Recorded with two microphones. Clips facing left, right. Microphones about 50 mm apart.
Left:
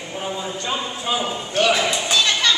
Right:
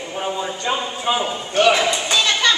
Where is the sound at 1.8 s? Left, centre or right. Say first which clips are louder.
Right 2 dB; centre.